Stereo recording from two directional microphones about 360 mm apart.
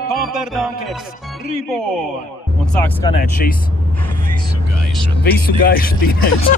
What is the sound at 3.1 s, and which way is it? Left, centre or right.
Speech, centre.